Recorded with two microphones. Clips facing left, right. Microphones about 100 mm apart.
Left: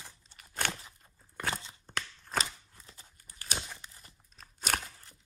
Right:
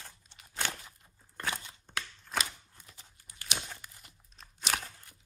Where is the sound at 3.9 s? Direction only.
40° left (ahead or behind).